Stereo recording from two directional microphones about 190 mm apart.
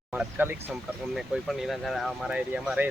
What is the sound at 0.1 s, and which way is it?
Speech, 10° right (ahead or behind).